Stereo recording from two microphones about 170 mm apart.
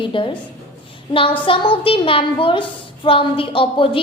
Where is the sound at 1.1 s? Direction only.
30° left (ahead or behind).